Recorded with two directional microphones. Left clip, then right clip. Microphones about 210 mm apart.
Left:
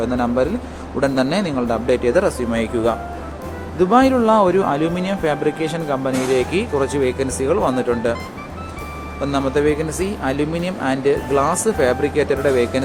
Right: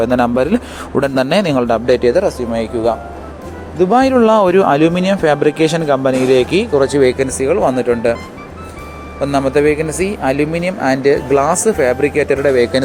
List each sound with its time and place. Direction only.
0.0 s speech: 40° right (ahead or behind)
2.1 s speech: centre (ahead or behind)
3.9 s speech: 35° right (ahead or behind); by 8.1 s 15° right (ahead or behind)
9.2 s speech: 20° right (ahead or behind)